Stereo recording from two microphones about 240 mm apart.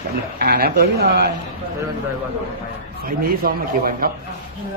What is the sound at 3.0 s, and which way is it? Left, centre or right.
A man's voice, right.